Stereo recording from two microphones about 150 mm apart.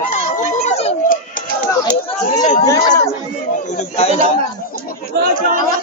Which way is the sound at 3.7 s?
45° left (ahead or behind).